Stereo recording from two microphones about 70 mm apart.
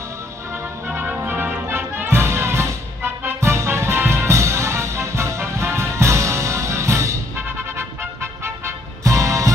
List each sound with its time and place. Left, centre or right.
0.5 s music: right